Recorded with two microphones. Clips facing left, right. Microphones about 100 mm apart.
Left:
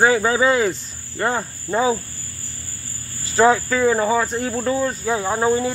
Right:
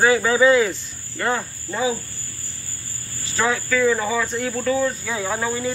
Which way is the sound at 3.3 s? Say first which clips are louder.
Left 5 dB; 35° left (ahead or behind).